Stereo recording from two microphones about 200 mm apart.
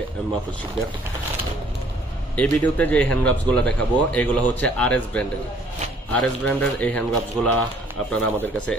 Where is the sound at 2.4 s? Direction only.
5° left (ahead or behind).